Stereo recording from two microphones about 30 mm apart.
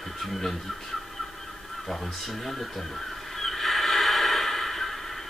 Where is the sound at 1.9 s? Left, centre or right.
Centre.